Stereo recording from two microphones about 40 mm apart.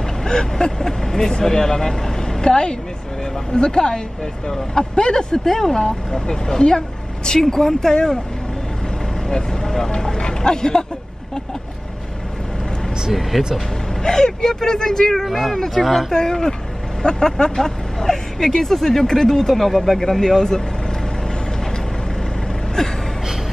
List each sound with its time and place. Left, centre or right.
0.2 s a woman's voice: centre
9.3 s speech: centre
13.1 s speech: centre
14.0 s speech: centre
16.1 s speech: centre
22.8 s a sound: centre